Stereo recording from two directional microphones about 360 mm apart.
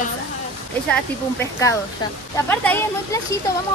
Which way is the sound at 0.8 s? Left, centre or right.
Centre.